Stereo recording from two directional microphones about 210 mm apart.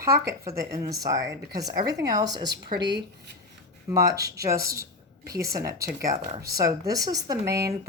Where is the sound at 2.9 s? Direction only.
55° right (ahead or behind).